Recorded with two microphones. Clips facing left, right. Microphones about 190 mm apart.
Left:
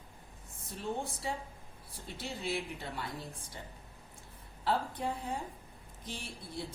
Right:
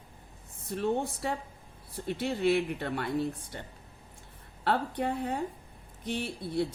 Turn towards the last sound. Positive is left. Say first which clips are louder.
# right 11 dB
turn(degrees=-65)  # may be behind; listen again after turning